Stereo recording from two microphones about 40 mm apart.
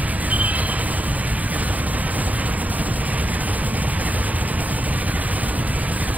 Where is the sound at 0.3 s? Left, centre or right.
Right.